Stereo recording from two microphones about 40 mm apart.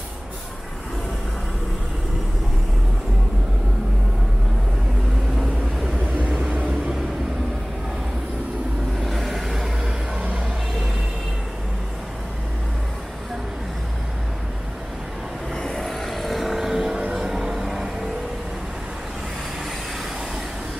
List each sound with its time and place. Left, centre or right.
5.9 s vehicle: right
6.3 s vehicle: right
9.0 s vehicle: centre
15.5 s vehicle: centre
17.1 s music: centre